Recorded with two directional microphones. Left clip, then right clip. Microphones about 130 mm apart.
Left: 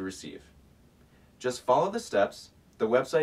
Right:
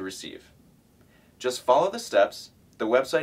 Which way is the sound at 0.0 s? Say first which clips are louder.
Right 2 dB; 30° right (ahead or behind).